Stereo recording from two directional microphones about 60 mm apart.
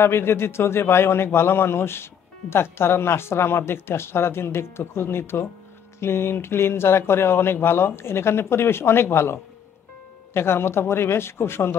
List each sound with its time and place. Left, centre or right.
0.0 s speech: left